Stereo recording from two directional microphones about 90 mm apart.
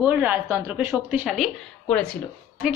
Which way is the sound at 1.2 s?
Centre (ahead or behind).